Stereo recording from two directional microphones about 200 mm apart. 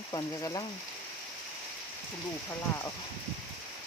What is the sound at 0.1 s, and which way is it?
Speech, 20° left (ahead or behind).